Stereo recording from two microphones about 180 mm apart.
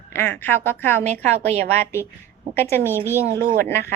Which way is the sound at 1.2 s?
35° right (ahead or behind).